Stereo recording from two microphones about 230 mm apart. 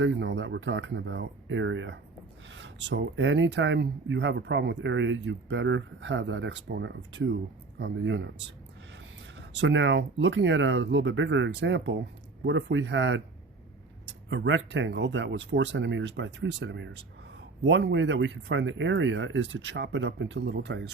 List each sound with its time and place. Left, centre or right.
0.0 s speech: right
9.4 s speech: right
14.3 s speech: right